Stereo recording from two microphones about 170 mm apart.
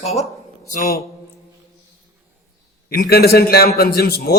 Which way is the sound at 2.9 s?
65° left (ahead or behind).